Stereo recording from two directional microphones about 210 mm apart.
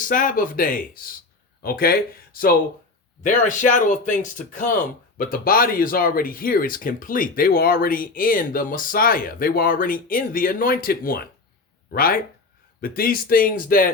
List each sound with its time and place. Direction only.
0.0 s speech: 40° left (ahead or behind)